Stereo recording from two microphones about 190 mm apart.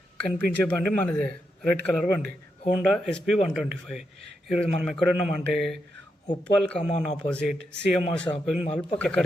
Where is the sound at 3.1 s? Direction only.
5° left (ahead or behind).